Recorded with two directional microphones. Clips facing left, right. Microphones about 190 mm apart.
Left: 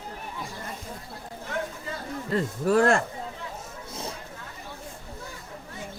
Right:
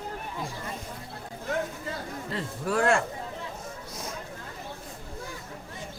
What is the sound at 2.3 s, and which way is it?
Speech, 40° left (ahead or behind).